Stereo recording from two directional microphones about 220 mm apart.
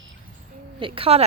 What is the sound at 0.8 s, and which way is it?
Speech, 25° right (ahead or behind).